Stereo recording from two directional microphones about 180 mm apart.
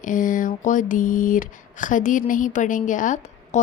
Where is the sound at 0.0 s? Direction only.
45° left (ahead or behind).